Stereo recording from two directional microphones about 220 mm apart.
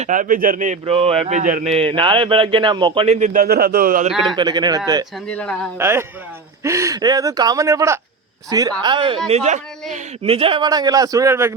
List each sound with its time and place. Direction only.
0.0 s speech: 35° right (ahead or behind)
4.4 s a man's voice: 20° right (ahead or behind)
5.3 s speech: 5° left (ahead or behind)
5.8 s a man's voice: 10° right (ahead or behind)